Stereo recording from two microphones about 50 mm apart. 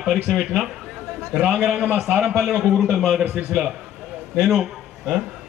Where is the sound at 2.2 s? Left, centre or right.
Centre.